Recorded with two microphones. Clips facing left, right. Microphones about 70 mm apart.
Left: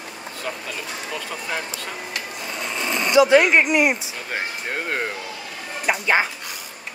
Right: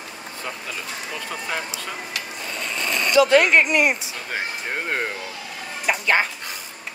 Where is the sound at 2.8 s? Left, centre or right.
Right.